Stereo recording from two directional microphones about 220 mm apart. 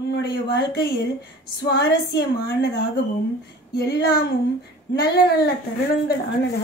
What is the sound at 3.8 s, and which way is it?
A woman's voice, 45° left (ahead or behind).